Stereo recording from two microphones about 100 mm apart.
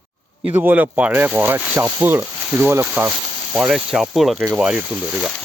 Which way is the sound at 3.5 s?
10° right (ahead or behind).